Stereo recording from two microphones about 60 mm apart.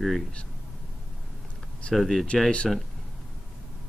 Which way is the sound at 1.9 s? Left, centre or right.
Centre.